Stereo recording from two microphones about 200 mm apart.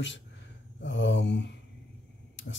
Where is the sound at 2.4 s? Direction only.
65° left (ahead or behind).